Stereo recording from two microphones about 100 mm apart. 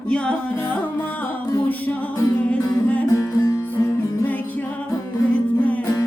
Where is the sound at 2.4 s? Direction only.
15° left (ahead or behind).